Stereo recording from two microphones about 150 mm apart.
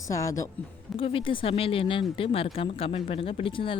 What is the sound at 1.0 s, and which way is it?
Speech, 35° left (ahead or behind).